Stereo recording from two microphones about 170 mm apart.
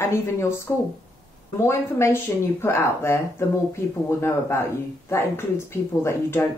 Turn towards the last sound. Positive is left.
turn(degrees=15)  # may be behind; listen again after turning